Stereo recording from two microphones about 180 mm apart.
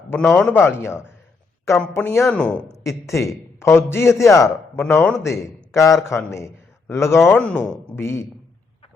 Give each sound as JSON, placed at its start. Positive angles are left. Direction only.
{"t": 0.1, "sound": "a man's voice", "side_deg": 5}
{"t": 2.8, "sound": "a man's voice", "side_deg": 15}